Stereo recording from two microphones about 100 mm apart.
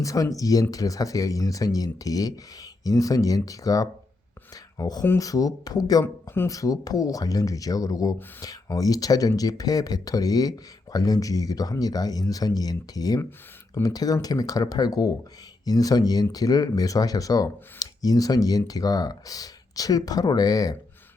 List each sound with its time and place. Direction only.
0.0 s speech: 35° left (ahead or behind)